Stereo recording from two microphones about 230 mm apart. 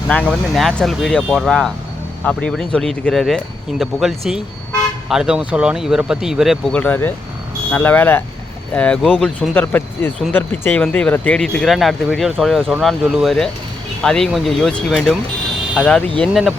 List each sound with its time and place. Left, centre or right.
0.1 s speech: centre